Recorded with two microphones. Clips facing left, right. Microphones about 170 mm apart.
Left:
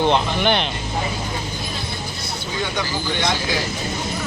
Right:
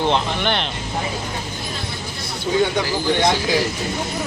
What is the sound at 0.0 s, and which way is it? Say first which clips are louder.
Speech: left 2 dB; 5° left (ahead or behind).